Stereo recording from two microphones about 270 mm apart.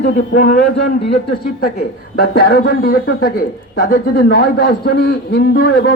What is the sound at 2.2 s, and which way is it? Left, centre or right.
Speech, left.